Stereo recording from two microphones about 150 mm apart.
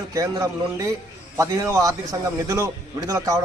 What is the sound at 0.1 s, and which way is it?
A man's voice, 20° right (ahead or behind).